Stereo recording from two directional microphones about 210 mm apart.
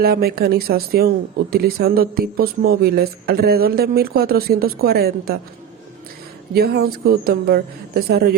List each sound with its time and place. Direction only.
0.0 s speech: 45° right (ahead or behind)
6.5 s speech: 50° right (ahead or behind)